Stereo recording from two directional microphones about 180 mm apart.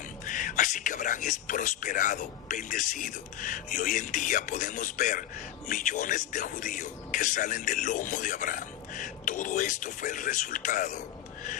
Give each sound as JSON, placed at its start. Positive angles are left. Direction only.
{"t": 0.3, "sound": "speech", "side_deg": 45}